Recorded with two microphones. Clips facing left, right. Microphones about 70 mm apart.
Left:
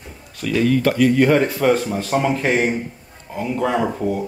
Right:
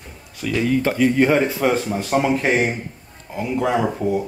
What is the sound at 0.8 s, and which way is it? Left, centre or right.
Speech, centre.